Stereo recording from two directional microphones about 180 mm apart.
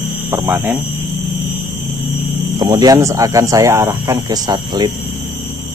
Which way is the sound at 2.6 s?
20° right (ahead or behind).